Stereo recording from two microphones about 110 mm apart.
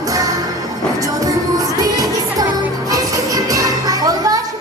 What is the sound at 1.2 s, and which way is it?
Music, 35° right (ahead or behind).